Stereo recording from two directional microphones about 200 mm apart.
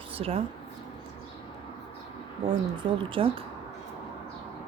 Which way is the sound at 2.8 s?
25° right (ahead or behind).